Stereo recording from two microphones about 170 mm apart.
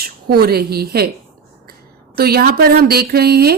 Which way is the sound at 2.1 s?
65° right (ahead or behind).